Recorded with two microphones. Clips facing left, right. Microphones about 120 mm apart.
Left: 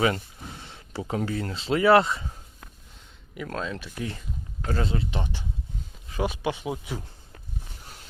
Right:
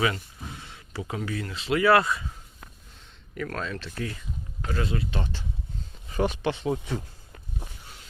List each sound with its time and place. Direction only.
0.0 s speech: 30° left (ahead or behind)
3.3 s speech: 20° left (ahead or behind)
4.7 s speech: 30° left (ahead or behind)
6.1 s speech: 5° left (ahead or behind)